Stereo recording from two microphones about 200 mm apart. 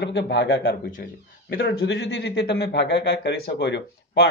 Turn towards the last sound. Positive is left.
turn(degrees=60)  # may be behind; listen again after turning